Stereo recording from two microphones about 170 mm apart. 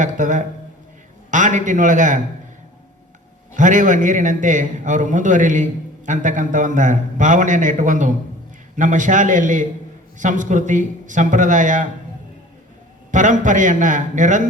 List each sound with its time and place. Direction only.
0.0 s a man's voice: 45° right (ahead or behind)
3.5 s a man's voice: 50° right (ahead or behind)
13.1 s a man's voice: 50° right (ahead or behind)